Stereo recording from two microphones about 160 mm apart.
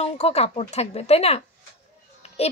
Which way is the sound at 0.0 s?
40° left (ahead or behind).